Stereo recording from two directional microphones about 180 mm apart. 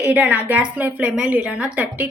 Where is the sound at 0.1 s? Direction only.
10° right (ahead or behind).